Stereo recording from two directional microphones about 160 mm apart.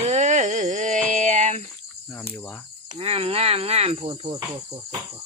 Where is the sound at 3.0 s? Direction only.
35° right (ahead or behind).